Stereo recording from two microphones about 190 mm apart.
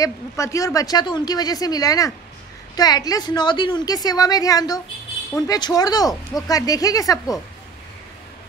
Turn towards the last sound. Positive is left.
turn(degrees=20)  # may be behind; listen again after turning